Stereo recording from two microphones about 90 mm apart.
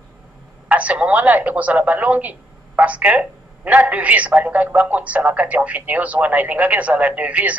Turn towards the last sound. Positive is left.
turn(degrees=-15)  # may be behind; listen again after turning